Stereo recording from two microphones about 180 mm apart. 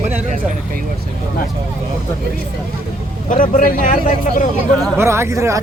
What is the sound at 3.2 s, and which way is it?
Speech, 45° left (ahead or behind).